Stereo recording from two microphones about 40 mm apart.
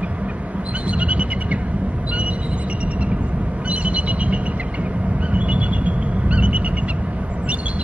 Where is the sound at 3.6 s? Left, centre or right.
Right.